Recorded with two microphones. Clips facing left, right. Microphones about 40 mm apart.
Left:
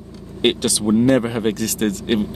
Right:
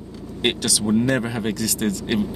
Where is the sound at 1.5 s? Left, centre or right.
Left.